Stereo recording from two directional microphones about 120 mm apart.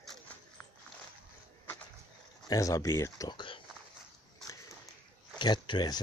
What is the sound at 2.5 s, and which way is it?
Speech, 30° left (ahead or behind).